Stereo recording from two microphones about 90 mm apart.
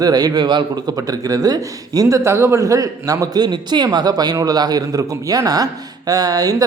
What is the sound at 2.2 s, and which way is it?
A man's voice, 30° right (ahead or behind).